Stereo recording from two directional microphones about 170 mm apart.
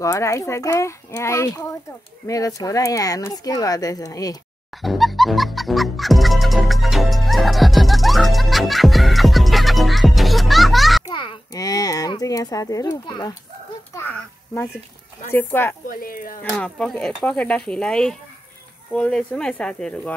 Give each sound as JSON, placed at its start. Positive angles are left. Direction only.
{"t": 0.0, "sound": "a child's voice", "side_deg": 15}
{"t": 4.8, "sound": "music", "side_deg": 0}
{"t": 11.1, "sound": "a child's voice", "side_deg": 25}
{"t": 15.3, "sound": "speech", "side_deg": 10}
{"t": 15.9, "sound": "speech", "side_deg": 55}
{"t": 16.4, "sound": "speech", "side_deg": 5}